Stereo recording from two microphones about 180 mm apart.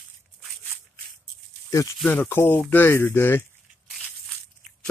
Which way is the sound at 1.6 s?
20° left (ahead or behind).